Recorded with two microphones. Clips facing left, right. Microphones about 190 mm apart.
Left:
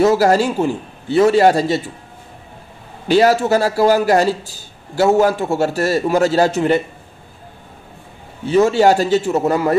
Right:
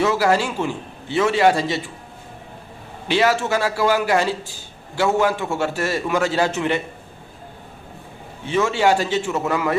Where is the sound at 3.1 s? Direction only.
40° left (ahead or behind).